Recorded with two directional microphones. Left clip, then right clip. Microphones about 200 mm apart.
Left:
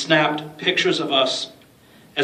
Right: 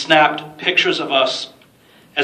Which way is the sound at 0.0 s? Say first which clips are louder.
Right 5 dB; 50° left (ahead or behind).